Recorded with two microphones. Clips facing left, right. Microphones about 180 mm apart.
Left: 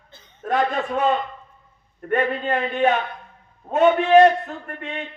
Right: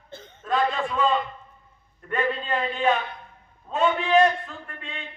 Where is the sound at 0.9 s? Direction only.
70° left (ahead or behind).